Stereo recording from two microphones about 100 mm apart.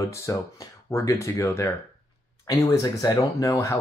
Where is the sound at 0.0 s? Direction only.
30° left (ahead or behind).